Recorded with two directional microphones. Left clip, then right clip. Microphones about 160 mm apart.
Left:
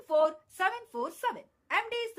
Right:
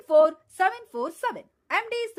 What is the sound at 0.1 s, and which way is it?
A woman's voice, 30° right (ahead or behind).